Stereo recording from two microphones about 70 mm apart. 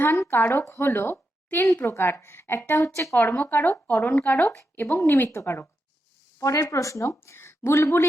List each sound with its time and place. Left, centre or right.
0.0 s a woman's voice: left
0.6 s a woman's voice: left
3.3 s a woman's voice: left
4.5 s a woman's voice: left